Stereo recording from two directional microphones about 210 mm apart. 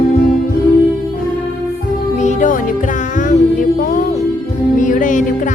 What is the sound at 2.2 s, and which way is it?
Music, 35° left (ahead or behind).